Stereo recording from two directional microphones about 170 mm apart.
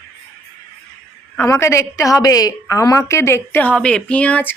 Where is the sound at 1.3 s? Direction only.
15° left (ahead or behind).